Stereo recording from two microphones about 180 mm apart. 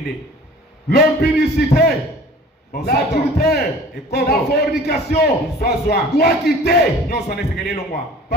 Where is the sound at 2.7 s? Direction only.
60° left (ahead or behind).